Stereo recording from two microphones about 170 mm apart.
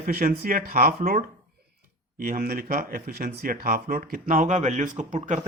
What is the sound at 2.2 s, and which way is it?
Speech, 60° right (ahead or behind).